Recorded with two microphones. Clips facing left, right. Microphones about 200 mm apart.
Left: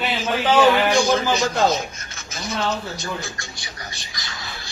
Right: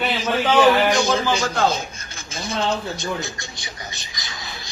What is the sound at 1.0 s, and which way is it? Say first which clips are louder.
Speech: left 1 dB; 30° right (ahead or behind).